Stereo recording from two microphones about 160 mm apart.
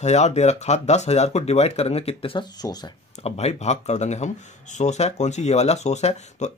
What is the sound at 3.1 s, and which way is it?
Speech, 40° left (ahead or behind).